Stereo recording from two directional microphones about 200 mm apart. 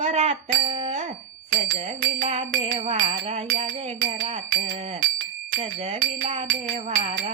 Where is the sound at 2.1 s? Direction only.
30° right (ahead or behind).